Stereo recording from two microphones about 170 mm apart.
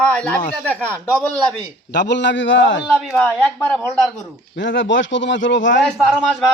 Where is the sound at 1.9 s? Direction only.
90° left.